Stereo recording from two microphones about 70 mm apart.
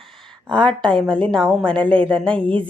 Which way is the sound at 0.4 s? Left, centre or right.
Centre.